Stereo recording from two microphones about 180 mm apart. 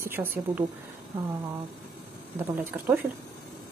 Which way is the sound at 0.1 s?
10° right (ahead or behind).